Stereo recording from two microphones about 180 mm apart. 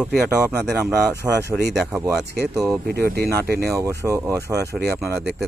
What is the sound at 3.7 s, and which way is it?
Speech, 15° right (ahead or behind).